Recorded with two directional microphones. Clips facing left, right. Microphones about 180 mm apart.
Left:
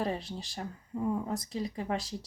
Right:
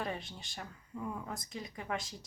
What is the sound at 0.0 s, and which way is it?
Speech, 35° left (ahead or behind).